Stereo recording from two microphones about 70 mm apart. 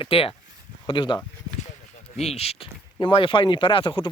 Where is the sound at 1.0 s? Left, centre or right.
Left.